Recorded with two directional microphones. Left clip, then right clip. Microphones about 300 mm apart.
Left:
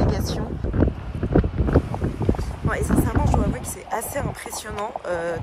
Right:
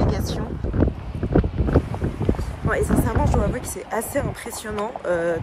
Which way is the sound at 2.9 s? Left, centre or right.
Centre.